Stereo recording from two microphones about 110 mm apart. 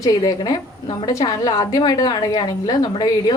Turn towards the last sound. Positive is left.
turn(degrees=40)  # may be behind; listen again after turning